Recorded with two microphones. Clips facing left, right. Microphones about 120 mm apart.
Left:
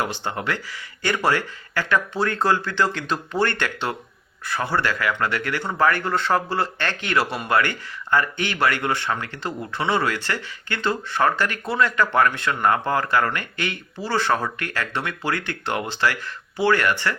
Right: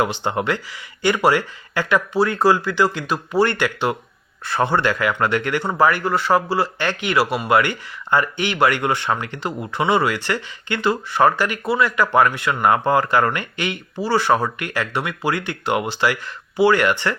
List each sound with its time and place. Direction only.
0.0 s speech: 15° right (ahead or behind)
4.4 s speech: 25° right (ahead or behind)